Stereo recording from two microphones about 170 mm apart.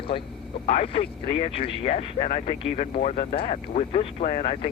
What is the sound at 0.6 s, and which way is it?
Speech, 35° left (ahead or behind).